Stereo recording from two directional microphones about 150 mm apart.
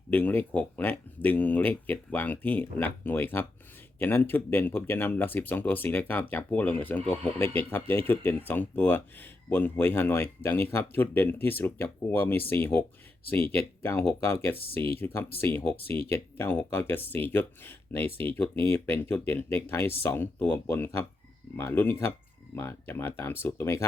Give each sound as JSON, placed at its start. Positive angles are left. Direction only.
{"t": 0.1, "sound": "speech", "side_deg": 10}
{"t": 13.8, "sound": "speech", "side_deg": 15}